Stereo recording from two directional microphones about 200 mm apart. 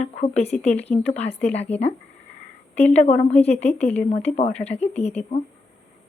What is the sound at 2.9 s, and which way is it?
A woman's voice, 35° left (ahead or behind).